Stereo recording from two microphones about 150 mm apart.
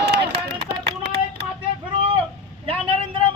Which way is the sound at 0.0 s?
90° right.